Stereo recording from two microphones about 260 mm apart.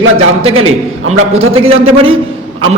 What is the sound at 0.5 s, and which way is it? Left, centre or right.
Speech, right.